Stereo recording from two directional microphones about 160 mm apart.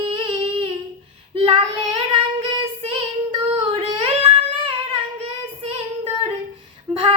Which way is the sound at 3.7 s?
35° right (ahead or behind).